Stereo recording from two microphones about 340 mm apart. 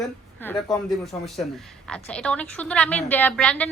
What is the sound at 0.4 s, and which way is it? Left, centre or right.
Speech, centre.